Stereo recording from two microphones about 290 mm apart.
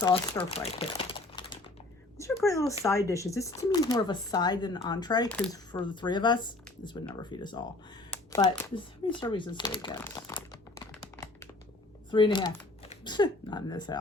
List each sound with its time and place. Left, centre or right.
0.5 s crumpling: centre
2.1 s speech: centre
10.9 s a sound: centre
12.1 s speech: centre